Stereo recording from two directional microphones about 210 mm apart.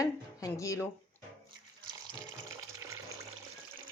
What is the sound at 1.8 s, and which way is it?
Water, 15° right (ahead or behind).